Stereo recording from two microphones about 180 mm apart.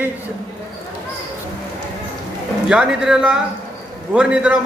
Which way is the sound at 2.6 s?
5° right (ahead or behind).